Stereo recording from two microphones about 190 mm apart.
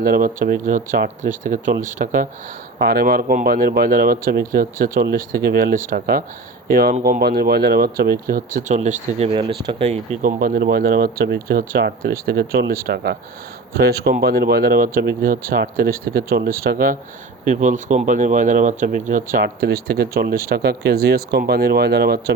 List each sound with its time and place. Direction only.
0.0 s speech: 50° right (ahead or behind)